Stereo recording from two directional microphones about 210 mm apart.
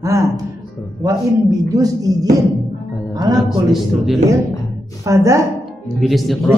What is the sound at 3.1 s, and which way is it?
Speech, 20° right (ahead or behind).